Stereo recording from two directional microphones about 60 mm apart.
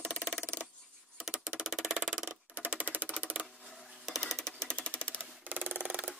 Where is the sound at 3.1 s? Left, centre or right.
Centre.